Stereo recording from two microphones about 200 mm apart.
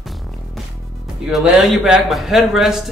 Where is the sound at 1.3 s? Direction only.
5° right (ahead or behind).